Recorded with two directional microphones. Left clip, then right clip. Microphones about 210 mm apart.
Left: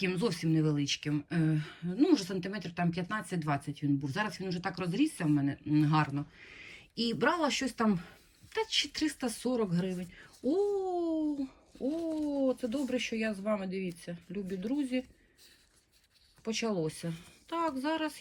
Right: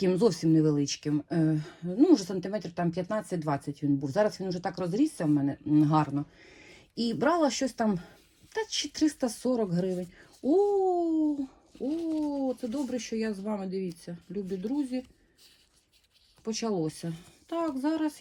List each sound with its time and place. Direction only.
0.0 s speech: 15° right (ahead or behind)
9.9 s speech: centre (ahead or behind)
10.7 s speech: 15° right (ahead or behind)
11.7 s speech: centre (ahead or behind)
12.3 s speech: 15° right (ahead or behind)
16.4 s speech: 10° right (ahead or behind)